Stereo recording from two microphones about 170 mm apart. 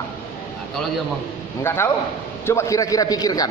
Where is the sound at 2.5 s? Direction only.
15° left (ahead or behind).